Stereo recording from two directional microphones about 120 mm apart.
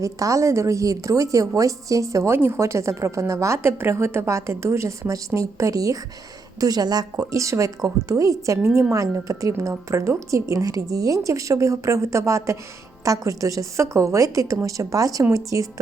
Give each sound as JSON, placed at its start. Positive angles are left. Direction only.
{"t": 0.0, "sound": "a woman's voice", "side_deg": -25}